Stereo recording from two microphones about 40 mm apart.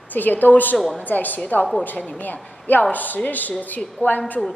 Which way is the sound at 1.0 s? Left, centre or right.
Left.